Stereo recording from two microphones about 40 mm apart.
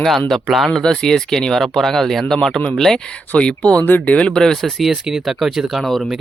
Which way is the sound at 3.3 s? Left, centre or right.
Left.